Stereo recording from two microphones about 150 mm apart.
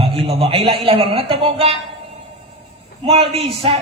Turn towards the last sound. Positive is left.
turn(degrees=-40)  # may be behind; listen again after turning